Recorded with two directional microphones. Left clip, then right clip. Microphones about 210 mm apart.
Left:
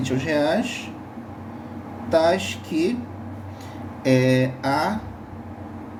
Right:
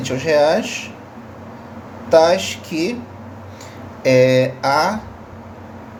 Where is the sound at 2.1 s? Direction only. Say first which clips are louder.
Right 7 dB; 40° right (ahead or behind).